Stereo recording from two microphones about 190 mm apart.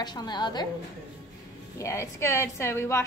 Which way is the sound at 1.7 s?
15° left (ahead or behind).